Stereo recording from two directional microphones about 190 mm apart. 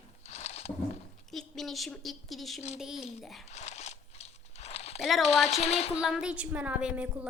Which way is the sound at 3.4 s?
35° left (ahead or behind).